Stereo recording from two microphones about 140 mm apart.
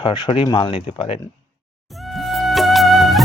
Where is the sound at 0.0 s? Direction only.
35° left (ahead or behind).